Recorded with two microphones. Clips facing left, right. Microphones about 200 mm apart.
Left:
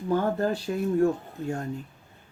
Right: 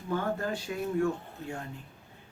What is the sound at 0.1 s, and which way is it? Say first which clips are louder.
Speech: left 6 dB; 40° left (ahead or behind).